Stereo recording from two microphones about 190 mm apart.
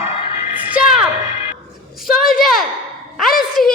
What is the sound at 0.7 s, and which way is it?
Music, 5° right (ahead or behind).